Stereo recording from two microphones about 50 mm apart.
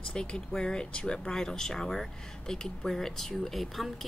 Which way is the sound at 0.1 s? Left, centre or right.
Centre.